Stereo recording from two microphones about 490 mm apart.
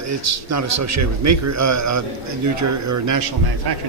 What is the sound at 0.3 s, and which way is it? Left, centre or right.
A man's voice, right.